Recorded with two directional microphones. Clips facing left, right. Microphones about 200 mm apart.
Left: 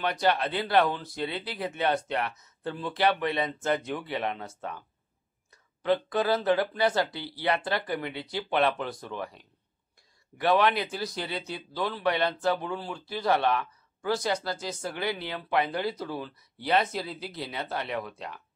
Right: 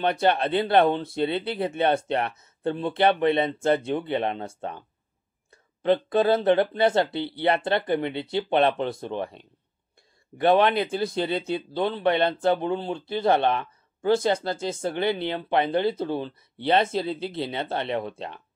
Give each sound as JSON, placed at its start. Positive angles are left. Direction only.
{"t": 0.0, "sound": "speech", "side_deg": -25}